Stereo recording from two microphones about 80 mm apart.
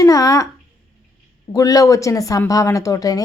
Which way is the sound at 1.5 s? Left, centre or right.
Left.